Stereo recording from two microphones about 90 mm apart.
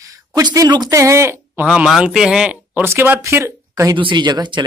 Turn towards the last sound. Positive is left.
turn(degrees=-55)  # may be behind; listen again after turning